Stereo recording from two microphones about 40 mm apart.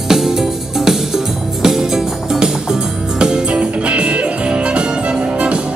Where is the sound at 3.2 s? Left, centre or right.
Right.